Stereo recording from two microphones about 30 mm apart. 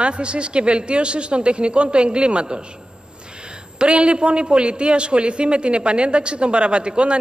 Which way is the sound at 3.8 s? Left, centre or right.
Right.